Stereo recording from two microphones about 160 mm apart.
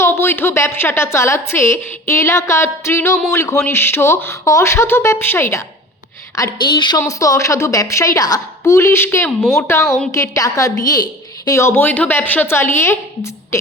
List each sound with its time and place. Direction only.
0.0 s a woman's voice: 15° left (ahead or behind)